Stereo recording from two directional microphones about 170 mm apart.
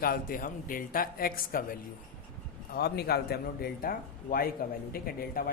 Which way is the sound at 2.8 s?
70° left (ahead or behind).